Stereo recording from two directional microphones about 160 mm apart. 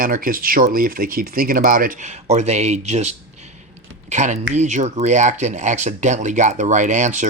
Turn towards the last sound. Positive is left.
turn(degrees=-50)  # may be behind; listen again after turning